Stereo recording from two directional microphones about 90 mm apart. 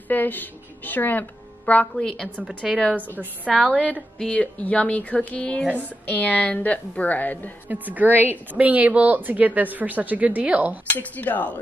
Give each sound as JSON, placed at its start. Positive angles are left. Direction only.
{"t": 0.1, "sound": "a woman's voice", "side_deg": 20}
{"t": 2.4, "sound": "a woman's voice", "side_deg": -10}
{"t": 2.8, "sound": "a woman's voice", "side_deg": 15}
{"t": 3.5, "sound": "a woman's voice", "side_deg": 0}
{"t": 4.2, "sound": "a woman's voice", "side_deg": 15}
{"t": 7.6, "sound": "a woman's voice", "side_deg": -20}
{"t": 11.0, "sound": "a woman's voice", "side_deg": 20}